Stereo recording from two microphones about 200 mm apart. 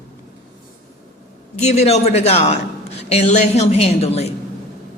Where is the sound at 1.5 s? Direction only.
35° left (ahead or behind).